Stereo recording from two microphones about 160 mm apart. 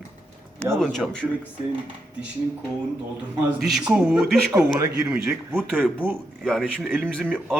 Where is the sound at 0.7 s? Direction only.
Centre (ahead or behind).